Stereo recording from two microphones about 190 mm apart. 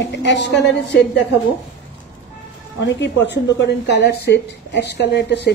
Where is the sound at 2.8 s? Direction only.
65° left (ahead or behind).